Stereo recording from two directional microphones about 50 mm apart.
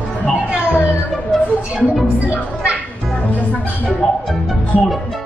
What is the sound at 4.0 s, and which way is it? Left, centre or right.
Speech, centre.